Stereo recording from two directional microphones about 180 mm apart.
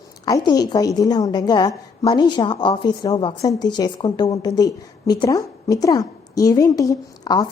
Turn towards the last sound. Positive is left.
turn(degrees=20)  # may be behind; listen again after turning